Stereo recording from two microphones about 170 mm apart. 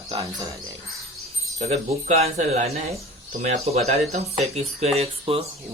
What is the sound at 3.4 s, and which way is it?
Speech, 40° right (ahead or behind).